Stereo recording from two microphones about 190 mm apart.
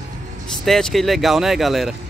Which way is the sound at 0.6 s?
Centre (ahead or behind).